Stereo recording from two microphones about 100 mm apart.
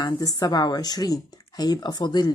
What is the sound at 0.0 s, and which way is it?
Speech, 40° left (ahead or behind).